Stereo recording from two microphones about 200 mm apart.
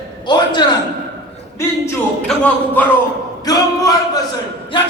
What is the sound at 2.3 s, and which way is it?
Speech, 5° left (ahead or behind).